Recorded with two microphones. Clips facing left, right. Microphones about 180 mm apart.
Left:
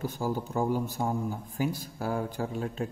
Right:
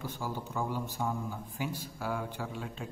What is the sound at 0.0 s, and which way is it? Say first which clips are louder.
A man's voice: left 7 dB; 40° left (ahead or behind).